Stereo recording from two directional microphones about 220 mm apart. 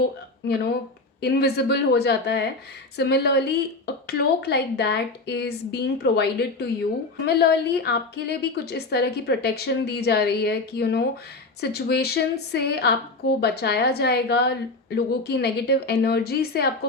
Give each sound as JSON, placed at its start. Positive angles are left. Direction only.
{"t": 1.2, "sound": "a woman's voice", "side_deg": 50}